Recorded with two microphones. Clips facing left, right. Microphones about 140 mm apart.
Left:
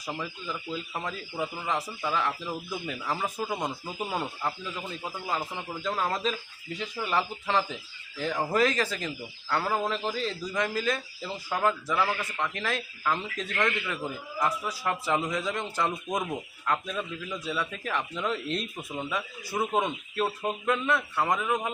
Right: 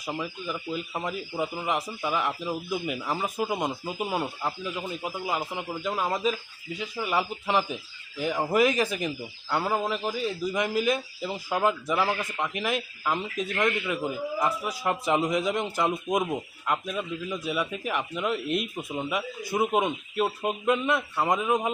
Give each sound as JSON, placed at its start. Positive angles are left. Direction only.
{"t": 0.0, "sound": "speech", "side_deg": -15}